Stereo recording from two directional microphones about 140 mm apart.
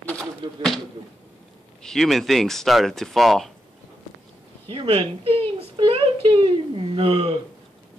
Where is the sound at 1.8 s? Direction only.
5° left (ahead or behind).